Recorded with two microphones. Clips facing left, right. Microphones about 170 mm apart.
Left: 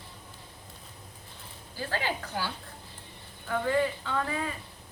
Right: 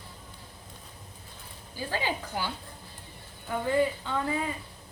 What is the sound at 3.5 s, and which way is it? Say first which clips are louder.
Speech: right 1 dB; 20° right (ahead or behind).